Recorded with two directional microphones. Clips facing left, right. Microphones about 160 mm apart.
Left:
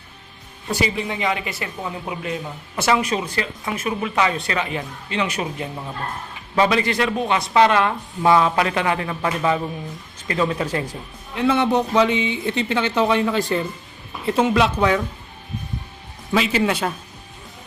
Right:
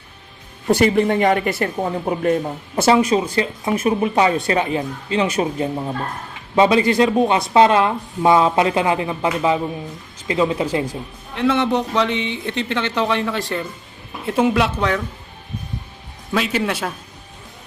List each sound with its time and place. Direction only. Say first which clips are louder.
0.7 s speech: right 9 dB; 55° right (ahead or behind)
2.8 s a woman's voice: right 5 dB; 30° right (ahead or behind)
11.3 s speech: even; 5° left (ahead or behind)
14.3 s speech: right 1 dB; 10° right (ahead or behind)
14.8 s speech: left 2 dB; 5° left (ahead or behind)
16.3 s speech: left 1 dB; centre (ahead or behind)